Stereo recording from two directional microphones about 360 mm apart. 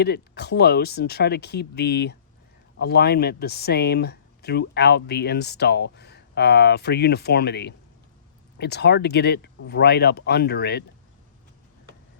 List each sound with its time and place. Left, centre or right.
0.0 s speech: left